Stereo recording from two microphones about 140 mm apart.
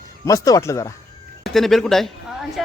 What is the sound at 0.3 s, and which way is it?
Speech, 25° left (ahead or behind).